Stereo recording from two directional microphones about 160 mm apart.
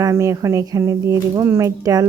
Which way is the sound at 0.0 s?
20° right (ahead or behind).